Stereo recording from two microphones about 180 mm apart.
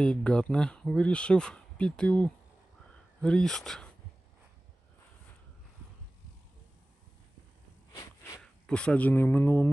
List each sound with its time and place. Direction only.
0.0 s speech: 5° left (ahead or behind)
7.9 s a sound: 20° left (ahead or behind)
8.4 s speech: 5° left (ahead or behind)